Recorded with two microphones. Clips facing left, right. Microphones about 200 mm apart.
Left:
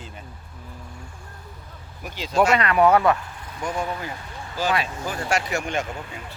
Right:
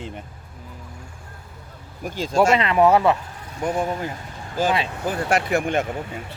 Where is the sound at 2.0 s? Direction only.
45° right (ahead or behind).